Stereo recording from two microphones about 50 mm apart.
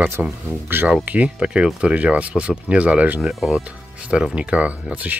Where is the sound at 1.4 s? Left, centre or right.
Centre.